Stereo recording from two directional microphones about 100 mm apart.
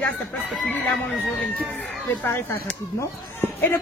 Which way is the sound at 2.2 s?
20° left (ahead or behind).